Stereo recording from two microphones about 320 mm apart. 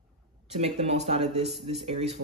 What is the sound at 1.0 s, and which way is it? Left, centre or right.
Speech, centre.